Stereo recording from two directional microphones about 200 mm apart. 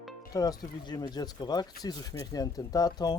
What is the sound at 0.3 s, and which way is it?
Speech, 20° left (ahead or behind).